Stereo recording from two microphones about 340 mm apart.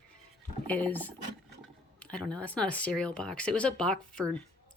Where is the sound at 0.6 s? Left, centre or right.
Centre.